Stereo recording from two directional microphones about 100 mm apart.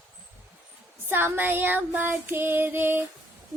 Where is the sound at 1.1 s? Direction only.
20° right (ahead or behind).